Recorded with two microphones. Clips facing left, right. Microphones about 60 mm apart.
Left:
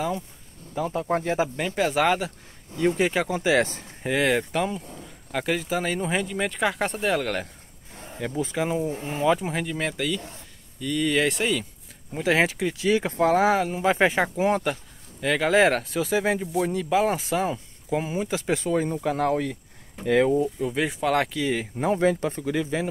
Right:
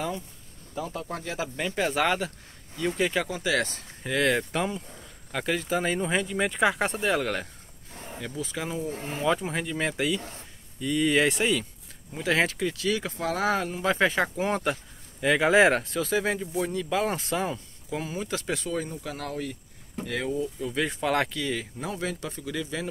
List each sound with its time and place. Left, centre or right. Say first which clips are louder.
0.7 s speech: left 8 dB; left
1.6 s speech: right 1 dB; centre
2.8 s speech: left 4 dB; centre
8.2 s speech: left 7 dB; left
9.1 s speech: left 3 dB; centre
9.9 s speech: even; centre
12.1 s speech: left 3 dB; centre
13.4 s speech: left 5 dB; centre
14.3 s speech: left 4 dB; centre
17.9 s speech: left 5 dB; centre
18.9 s speech: left 11 dB; left
20.7 s speech: left 1 dB; centre
21.4 s speech: left 5 dB; centre
21.7 s speech: left 10 dB; left